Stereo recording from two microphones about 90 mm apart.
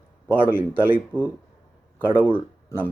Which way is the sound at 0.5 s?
20° right (ahead or behind).